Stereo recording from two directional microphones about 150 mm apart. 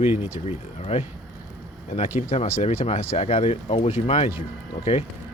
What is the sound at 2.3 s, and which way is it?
Speech, 45° left (ahead or behind).